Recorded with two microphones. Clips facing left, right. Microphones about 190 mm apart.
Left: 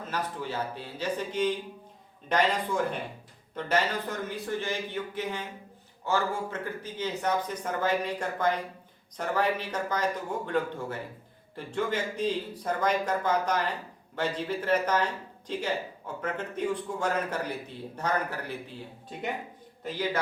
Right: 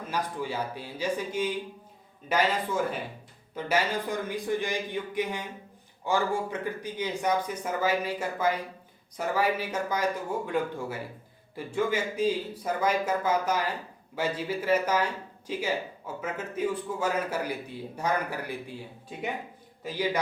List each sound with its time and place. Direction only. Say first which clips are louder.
0.1 s a man's voice: right 2 dB; 10° right (ahead or behind)